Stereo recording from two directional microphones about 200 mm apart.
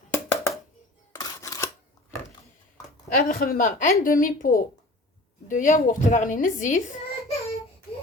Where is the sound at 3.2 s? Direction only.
45° left (ahead or behind).